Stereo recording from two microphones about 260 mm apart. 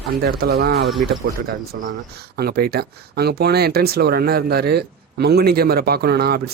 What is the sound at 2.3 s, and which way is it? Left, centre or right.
Speech, right.